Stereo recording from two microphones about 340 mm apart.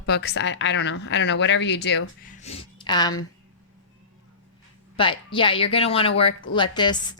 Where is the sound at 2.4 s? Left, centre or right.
Centre.